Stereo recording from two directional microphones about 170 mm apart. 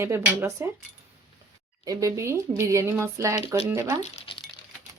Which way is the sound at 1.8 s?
20° right (ahead or behind).